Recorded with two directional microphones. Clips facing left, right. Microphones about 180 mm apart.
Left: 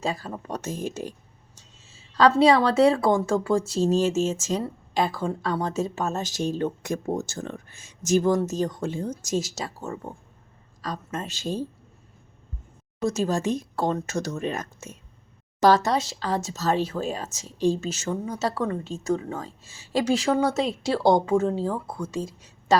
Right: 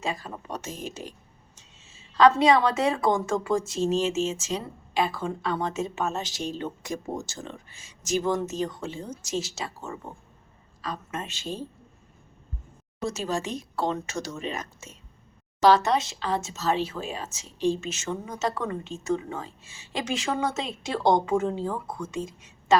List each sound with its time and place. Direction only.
0.0 s speech: 35° left (ahead or behind)
1.5 s speech: 35° left (ahead or behind)
13.1 s speech: 45° left (ahead or behind)
15.6 s speech: 40° left (ahead or behind)